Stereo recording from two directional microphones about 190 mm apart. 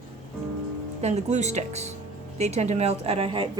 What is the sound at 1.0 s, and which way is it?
A woman's voice, 35° right (ahead or behind).